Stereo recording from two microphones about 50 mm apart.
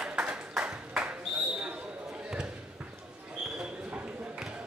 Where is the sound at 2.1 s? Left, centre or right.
Centre.